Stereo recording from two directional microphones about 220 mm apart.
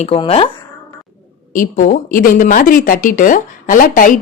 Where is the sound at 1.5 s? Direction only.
35° left (ahead or behind).